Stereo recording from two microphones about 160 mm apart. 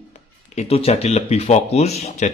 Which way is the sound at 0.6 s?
40° left (ahead or behind).